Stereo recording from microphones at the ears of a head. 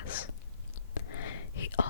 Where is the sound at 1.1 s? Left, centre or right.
Left.